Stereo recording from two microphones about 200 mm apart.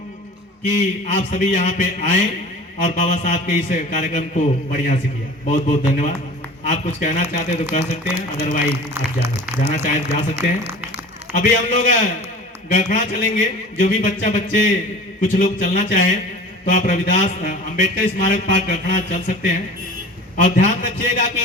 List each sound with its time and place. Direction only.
1.0 s a man's voice: 40° left (ahead or behind)
9.6 s a man's voice: 35° left (ahead or behind)